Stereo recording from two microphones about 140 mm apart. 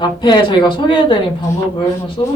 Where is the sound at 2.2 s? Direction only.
40° left (ahead or behind).